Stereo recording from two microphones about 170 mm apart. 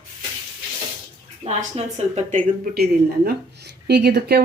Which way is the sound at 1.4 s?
40° right (ahead or behind).